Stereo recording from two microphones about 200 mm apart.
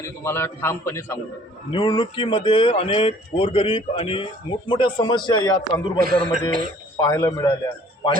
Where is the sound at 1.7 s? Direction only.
25° left (ahead or behind).